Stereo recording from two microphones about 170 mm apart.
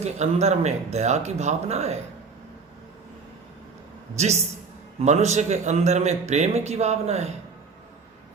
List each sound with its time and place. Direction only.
0.0 s a man's voice: 40° right (ahead or behind)
4.2 s a man's voice: 40° right (ahead or behind)